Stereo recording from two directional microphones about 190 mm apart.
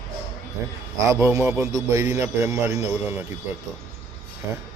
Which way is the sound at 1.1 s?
15° right (ahead or behind).